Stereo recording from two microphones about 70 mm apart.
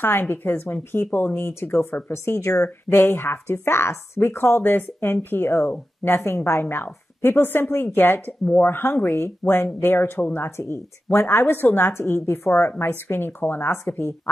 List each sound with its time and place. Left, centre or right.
0.0 s speech: left
2.3 s speech: left
2.9 s speech: left